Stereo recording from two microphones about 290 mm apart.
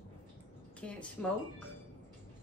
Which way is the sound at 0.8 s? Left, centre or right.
Centre.